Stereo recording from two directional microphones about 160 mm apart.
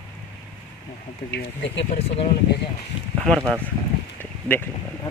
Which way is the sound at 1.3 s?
90° left.